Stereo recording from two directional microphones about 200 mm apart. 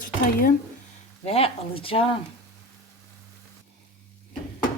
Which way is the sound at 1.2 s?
30° left (ahead or behind).